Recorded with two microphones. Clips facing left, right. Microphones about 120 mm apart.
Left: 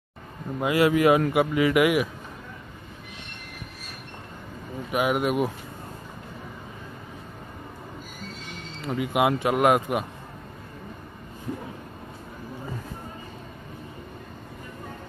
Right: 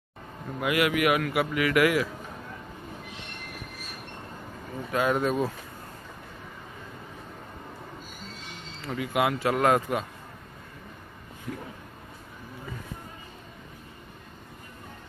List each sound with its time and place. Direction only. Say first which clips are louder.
0.6 s a man's voice: left 4 dB; 30° left (ahead or behind)
4.9 s speech: left 1 dB; 15° left (ahead or behind)
8.8 s a man's voice: left 3 dB; 20° left (ahead or behind)